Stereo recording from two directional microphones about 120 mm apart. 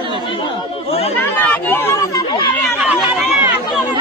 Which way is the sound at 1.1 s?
15° left (ahead or behind).